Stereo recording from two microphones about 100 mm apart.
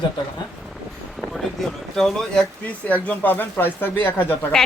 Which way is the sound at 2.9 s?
15° left (ahead or behind).